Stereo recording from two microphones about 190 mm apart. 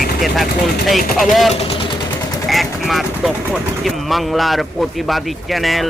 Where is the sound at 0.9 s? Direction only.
Centre (ahead or behind).